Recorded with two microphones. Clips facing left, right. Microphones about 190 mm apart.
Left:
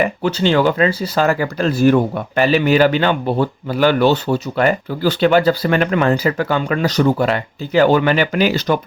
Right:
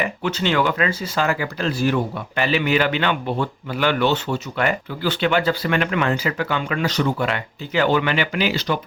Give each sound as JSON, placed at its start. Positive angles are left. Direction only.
{"t": 0.0, "sound": "speech", "side_deg": 35}